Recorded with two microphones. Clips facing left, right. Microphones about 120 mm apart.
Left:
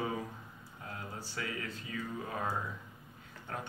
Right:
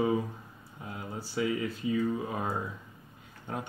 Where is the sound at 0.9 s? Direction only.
15° right (ahead or behind).